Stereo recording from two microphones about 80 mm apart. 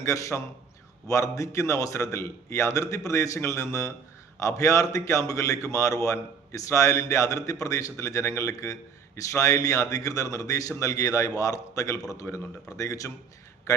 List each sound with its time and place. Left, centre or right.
0.0 s a man's voice: left